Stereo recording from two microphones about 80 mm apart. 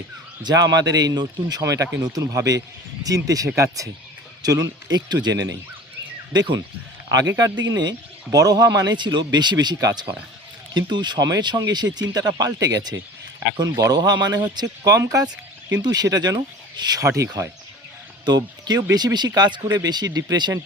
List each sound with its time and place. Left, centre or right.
0.4 s speech: right
5.0 s speech: right
7.1 s speech: right
14.8 s speech: right
17.0 s speech: right
18.3 s speech: right